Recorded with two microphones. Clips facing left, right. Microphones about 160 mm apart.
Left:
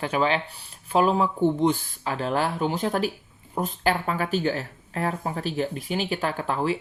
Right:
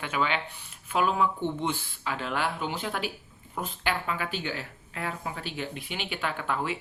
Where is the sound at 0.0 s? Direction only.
35° left (ahead or behind).